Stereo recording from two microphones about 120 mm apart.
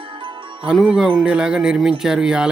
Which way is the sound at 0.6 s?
5° right (ahead or behind).